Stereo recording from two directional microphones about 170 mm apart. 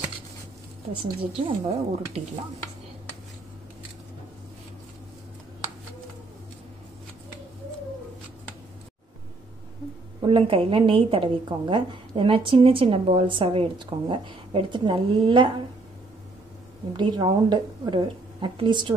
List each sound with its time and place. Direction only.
1.3 s a woman's voice: 40° right (ahead or behind)
10.2 s a woman's voice: 30° right (ahead or behind)
16.9 s a woman's voice: 25° right (ahead or behind)